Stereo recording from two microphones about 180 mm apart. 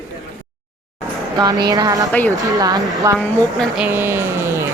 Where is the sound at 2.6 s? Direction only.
20° right (ahead or behind).